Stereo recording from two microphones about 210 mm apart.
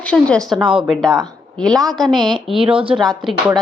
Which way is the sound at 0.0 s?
5° left (ahead or behind).